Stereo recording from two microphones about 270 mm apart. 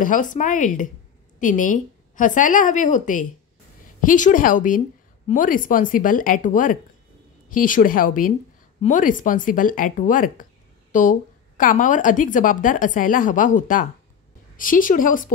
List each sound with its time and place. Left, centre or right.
0.0 s a woman's voice: left